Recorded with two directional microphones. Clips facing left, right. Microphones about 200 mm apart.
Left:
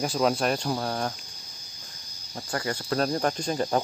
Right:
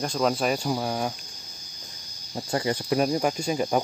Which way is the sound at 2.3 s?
20° right (ahead or behind).